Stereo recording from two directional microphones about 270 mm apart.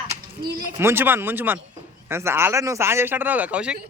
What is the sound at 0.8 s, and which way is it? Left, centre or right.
Speech, centre.